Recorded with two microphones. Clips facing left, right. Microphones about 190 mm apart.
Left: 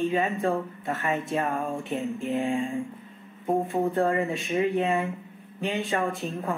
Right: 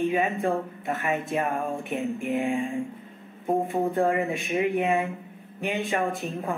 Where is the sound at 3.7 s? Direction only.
15° right (ahead or behind).